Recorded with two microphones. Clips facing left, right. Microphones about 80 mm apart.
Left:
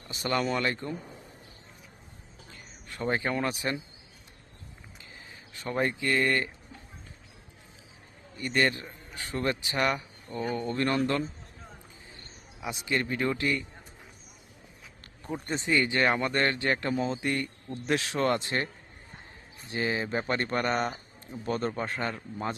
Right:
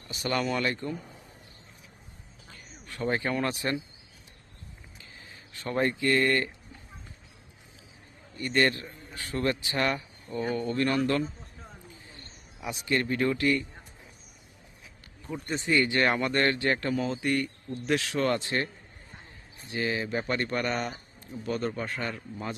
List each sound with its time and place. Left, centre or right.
0.1 s speech: left
2.8 s speech: left
5.5 s speech: centre
8.4 s speech: centre
8.7 s a man's voice: left
10.3 s speech: centre
10.7 s speech: left
12.5 s speech: centre
15.4 s speech: left